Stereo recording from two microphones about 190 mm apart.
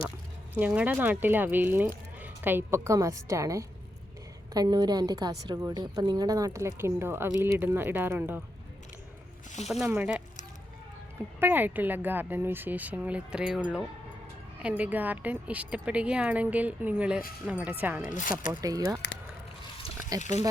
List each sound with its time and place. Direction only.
0.5 s a woman's voice: 5° right (ahead or behind)
9.6 s a woman's voice: 5° right (ahead or behind)
11.3 s a woman's voice: 10° right (ahead or behind)
18.1 s speech: 40° left (ahead or behind)
18.6 s speech: 20° right (ahead or behind)
20.1 s speech: 20° right (ahead or behind)